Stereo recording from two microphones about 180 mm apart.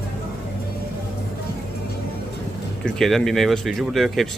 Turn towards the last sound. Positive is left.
turn(degrees=0)  # may be behind; listen again after turning